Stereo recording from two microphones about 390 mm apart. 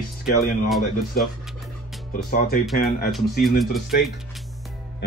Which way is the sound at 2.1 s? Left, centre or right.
Left.